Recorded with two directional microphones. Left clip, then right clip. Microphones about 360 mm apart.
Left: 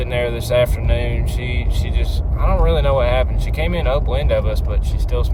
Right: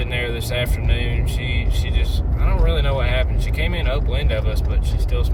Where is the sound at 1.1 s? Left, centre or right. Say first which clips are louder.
Even; centre.